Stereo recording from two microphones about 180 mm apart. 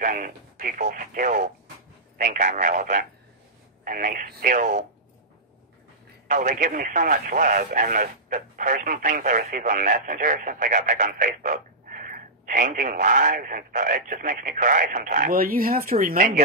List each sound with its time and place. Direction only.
0.0 s speech: 50° right (ahead or behind)
6.2 s speech: 45° right (ahead or behind)